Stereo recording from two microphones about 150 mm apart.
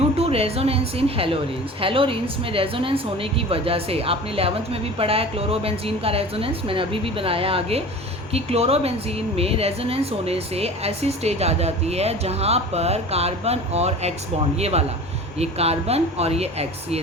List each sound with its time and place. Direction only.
0.2 s a woman's voice: 40° right (ahead or behind)